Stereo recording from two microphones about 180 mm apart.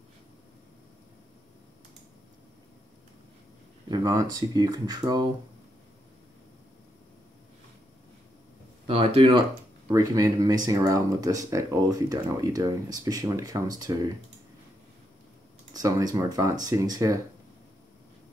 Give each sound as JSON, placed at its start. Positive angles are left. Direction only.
{"t": 3.9, "sound": "speech", "side_deg": -20}
{"t": 8.8, "sound": "speech", "side_deg": -35}
{"t": 9.8, "sound": "speech", "side_deg": -20}
{"t": 15.7, "sound": "speech", "side_deg": -20}